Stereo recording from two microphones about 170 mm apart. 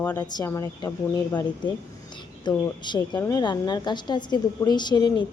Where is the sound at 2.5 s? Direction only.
25° left (ahead or behind).